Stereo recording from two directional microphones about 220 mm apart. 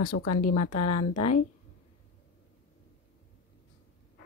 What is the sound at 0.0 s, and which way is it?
Speech, 90° left.